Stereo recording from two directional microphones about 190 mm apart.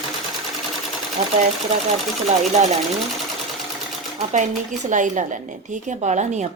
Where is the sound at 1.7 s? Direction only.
40° right (ahead or behind).